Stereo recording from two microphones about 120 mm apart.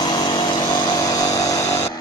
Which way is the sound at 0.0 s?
35° left (ahead or behind).